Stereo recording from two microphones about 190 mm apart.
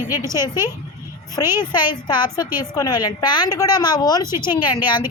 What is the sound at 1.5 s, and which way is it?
A woman's voice, 25° left (ahead or behind).